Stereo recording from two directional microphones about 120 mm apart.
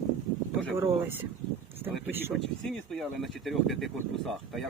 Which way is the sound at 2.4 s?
Centre (ahead or behind).